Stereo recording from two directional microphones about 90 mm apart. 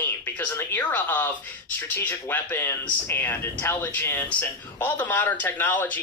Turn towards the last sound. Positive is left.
turn(degrees=20)  # may be behind; listen again after turning